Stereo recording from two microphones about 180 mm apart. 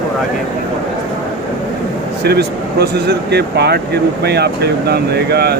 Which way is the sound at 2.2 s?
65° right (ahead or behind).